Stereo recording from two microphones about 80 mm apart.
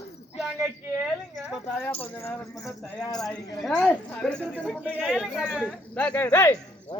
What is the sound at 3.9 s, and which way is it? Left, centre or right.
Speech, left.